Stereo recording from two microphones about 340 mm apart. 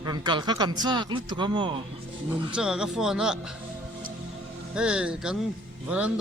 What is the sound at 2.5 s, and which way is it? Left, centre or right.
Speech, centre.